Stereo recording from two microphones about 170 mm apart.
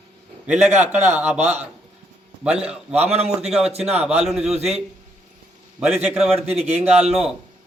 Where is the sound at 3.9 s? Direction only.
40° right (ahead or behind).